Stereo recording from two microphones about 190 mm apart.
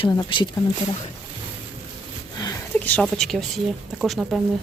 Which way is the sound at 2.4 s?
20° left (ahead or behind).